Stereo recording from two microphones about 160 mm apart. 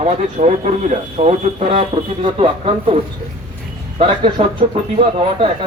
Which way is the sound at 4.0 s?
35° right (ahead or behind).